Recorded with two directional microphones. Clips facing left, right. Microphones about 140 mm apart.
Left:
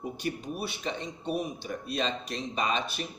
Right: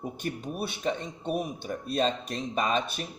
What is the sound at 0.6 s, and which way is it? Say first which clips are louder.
Speech: right 6 dB; 50° right (ahead or behind).